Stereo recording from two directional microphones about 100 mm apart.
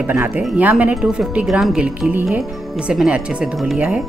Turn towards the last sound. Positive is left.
turn(degrees=-5)  # may be behind; listen again after turning